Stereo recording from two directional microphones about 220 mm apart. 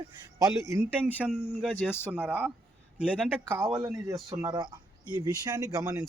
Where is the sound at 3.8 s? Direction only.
15° right (ahead or behind).